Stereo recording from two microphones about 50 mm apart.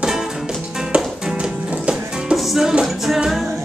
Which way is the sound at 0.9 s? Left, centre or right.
Centre.